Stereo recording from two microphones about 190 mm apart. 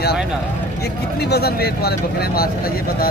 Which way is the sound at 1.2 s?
60° left (ahead or behind).